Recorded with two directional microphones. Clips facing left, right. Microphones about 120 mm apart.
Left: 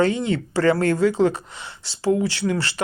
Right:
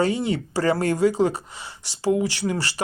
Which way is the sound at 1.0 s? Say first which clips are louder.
Left 1 dB; 40° right (ahead or behind).